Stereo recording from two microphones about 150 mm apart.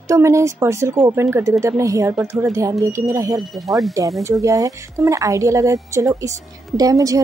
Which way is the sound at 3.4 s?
Centre (ahead or behind).